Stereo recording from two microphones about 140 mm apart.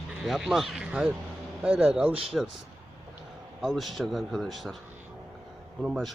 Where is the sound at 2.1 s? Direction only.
40° right (ahead or behind).